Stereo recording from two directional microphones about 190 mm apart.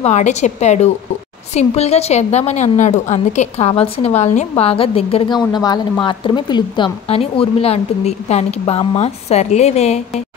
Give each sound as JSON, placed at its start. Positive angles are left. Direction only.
{"t": 0.0, "sound": "a woman's voice", "side_deg": 40}